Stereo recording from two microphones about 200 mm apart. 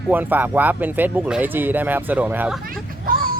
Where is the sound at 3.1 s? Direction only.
45° right (ahead or behind).